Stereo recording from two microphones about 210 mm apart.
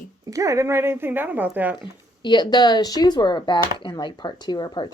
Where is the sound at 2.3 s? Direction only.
20° left (ahead or behind).